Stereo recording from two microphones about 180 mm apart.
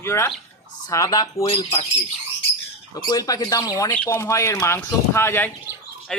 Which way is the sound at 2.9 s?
20° left (ahead or behind).